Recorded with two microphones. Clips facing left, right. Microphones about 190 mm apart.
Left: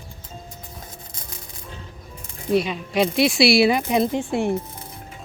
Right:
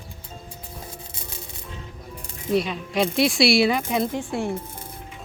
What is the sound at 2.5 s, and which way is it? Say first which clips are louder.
Speech: left 2 dB; 5° left (ahead or behind).